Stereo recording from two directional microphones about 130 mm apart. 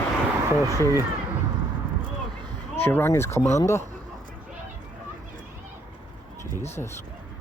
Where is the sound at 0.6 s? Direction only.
25° left (ahead or behind).